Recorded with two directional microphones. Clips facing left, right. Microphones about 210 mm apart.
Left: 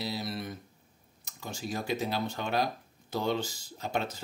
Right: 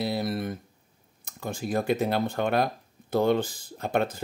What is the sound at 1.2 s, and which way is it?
Speech, 55° right (ahead or behind).